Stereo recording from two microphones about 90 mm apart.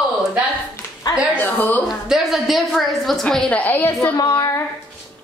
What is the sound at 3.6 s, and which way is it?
Speech, 25° left (ahead or behind).